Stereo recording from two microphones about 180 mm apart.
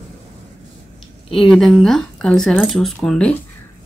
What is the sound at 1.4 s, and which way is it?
Speech, centre (ahead or behind).